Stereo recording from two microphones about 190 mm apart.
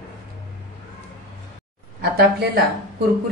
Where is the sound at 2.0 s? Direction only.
60° right (ahead or behind).